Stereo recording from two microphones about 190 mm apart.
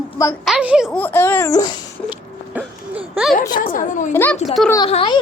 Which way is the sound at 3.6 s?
45° left (ahead or behind).